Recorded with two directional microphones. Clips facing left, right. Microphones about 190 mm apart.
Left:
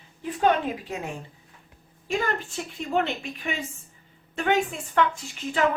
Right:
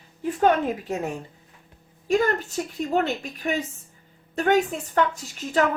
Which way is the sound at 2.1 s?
40° right (ahead or behind).